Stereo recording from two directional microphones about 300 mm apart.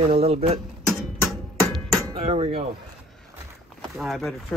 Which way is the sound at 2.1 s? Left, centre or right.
Centre.